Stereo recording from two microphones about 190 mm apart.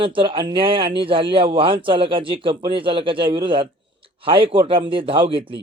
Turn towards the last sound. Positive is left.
turn(degrees=-25)  # may be behind; listen again after turning